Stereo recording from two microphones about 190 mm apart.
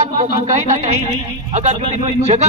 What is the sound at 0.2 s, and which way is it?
A man's voice, 40° right (ahead or behind).